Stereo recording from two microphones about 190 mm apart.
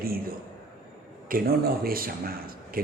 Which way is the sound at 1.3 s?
50° right (ahead or behind).